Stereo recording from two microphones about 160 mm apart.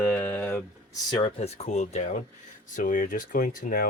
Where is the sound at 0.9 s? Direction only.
25° left (ahead or behind).